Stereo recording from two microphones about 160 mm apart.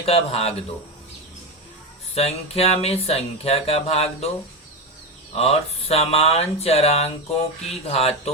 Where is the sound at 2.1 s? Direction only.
40° left (ahead or behind).